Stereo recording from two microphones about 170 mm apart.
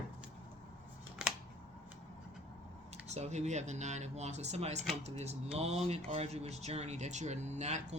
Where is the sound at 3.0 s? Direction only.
40° right (ahead or behind).